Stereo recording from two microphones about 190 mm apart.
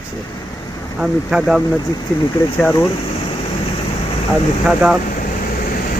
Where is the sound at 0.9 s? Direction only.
5° right (ahead or behind).